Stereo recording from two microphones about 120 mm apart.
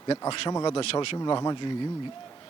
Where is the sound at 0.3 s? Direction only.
45° left (ahead or behind).